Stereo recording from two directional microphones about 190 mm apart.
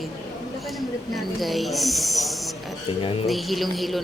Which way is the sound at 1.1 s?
Centre (ahead or behind).